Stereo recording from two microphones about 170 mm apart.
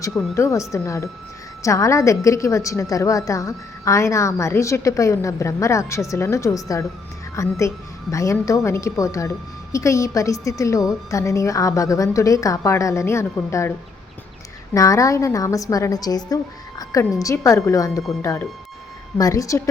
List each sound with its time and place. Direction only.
0.1 s a woman's voice: centre (ahead or behind)
0.3 s a woman's voice: 15° left (ahead or behind)